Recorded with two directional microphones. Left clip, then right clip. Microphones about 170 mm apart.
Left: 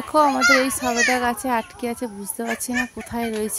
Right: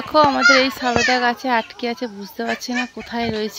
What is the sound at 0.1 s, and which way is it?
A child's voice, 10° left (ahead or behind).